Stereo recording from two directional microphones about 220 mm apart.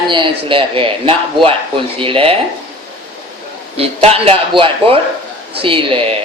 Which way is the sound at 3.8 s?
25° right (ahead or behind).